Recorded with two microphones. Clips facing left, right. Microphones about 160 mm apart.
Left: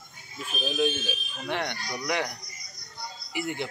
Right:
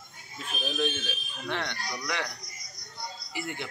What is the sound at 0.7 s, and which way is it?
Speech, 10° left (ahead or behind).